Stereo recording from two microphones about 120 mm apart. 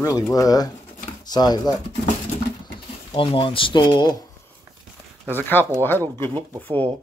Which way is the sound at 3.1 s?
45° left (ahead or behind).